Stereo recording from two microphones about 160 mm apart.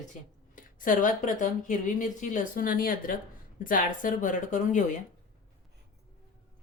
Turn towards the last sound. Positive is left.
turn(degrees=50)  # may be behind; listen again after turning